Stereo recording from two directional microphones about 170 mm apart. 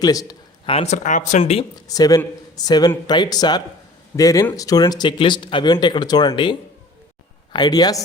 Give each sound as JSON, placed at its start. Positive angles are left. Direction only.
{"t": 0.0, "sound": "a sound", "side_deg": 20}
{"t": 0.7, "sound": "speech", "side_deg": 40}
{"t": 1.9, "sound": "speech", "side_deg": 20}